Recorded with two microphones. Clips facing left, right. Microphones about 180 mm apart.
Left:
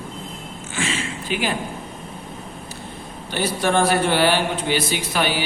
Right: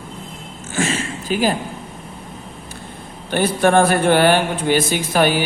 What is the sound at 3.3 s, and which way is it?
Speech, 55° right (ahead or behind).